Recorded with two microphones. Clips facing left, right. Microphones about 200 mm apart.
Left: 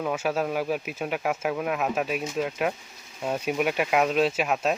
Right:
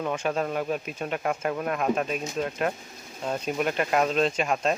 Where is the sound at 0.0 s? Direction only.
5° left (ahead or behind).